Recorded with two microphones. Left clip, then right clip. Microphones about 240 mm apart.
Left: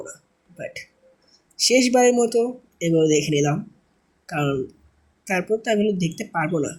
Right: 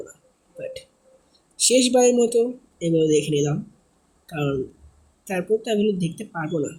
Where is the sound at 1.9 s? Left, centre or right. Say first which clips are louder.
Even; centre.